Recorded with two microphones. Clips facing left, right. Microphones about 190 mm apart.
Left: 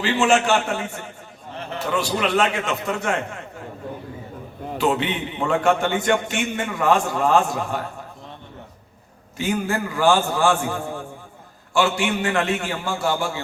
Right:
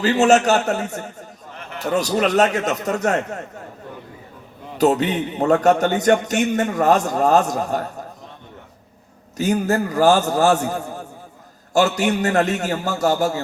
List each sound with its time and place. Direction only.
0.0 s a man's voice: 40° right (ahead or behind)
4.8 s a man's voice: 40° right (ahead or behind)
9.4 s a man's voice: 40° right (ahead or behind)